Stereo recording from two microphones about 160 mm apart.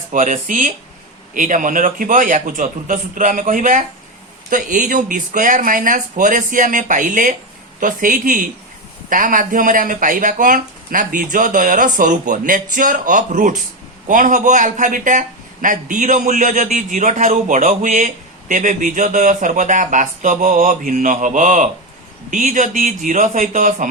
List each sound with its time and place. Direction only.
0.1 s a man's voice: 55° right (ahead or behind)